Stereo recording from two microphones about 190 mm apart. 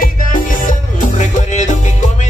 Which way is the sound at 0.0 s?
45° left (ahead or behind).